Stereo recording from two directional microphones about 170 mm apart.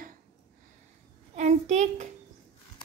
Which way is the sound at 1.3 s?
45° right (ahead or behind).